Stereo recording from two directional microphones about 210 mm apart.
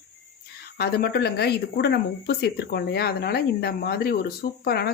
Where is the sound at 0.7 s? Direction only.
50° left (ahead or behind).